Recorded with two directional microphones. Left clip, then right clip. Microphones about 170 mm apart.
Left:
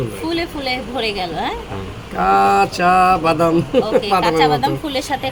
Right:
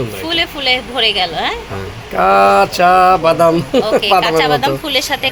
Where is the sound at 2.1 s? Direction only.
60° right (ahead or behind).